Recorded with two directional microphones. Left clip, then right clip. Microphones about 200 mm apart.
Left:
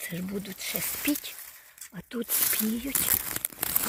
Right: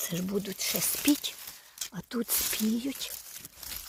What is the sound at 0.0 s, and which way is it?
Speech, 15° right (ahead or behind).